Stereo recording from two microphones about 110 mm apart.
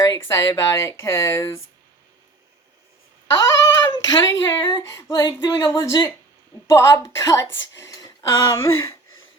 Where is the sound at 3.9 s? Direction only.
40° left (ahead or behind).